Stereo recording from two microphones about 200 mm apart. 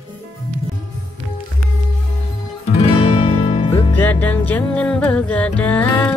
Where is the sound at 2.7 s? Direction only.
30° left (ahead or behind).